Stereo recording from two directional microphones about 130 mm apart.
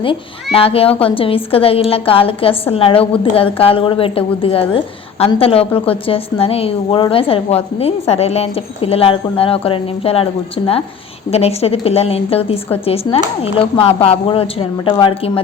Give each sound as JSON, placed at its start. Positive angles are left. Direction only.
{"t": 0.0, "sound": "a child's voice", "side_deg": 45}
{"t": 11.3, "sound": "a child's voice", "side_deg": 50}